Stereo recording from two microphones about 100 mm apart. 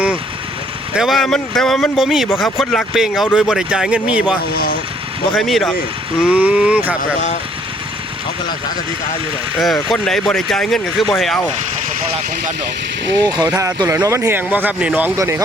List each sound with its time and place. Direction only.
0.9 s speech: centre (ahead or behind)
5.4 s speech: centre (ahead or behind)
6.1 s speech: 10° right (ahead or behind)
9.9 s speech: centre (ahead or behind)
13.2 s speech: 40° right (ahead or behind)
14.2 s speech: 20° right (ahead or behind)
15.1 s speech: 30° right (ahead or behind)